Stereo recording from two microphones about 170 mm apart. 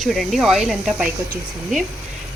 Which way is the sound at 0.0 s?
Centre (ahead or behind).